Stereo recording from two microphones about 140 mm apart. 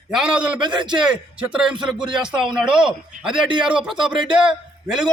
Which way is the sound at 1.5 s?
5° right (ahead or behind).